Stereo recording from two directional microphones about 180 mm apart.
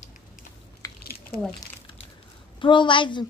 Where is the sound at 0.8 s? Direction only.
20° left (ahead or behind).